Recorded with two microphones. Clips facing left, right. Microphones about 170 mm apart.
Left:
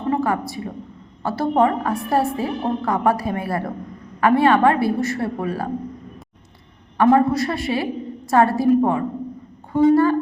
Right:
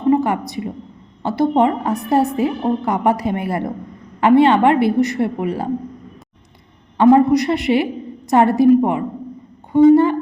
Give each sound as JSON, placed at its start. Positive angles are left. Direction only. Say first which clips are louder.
{"t": 0.1, "sound": "a woman's voice", "louder": "right 5 dB", "side_deg": -20}
{"t": 6.9, "sound": "a woman's voice", "louder": "right 4 dB", "side_deg": -20}